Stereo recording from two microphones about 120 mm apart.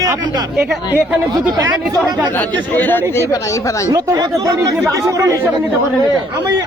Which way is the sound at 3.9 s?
30° right (ahead or behind).